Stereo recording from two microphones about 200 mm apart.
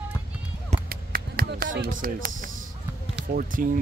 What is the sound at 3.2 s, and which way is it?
Speech, 40° right (ahead or behind).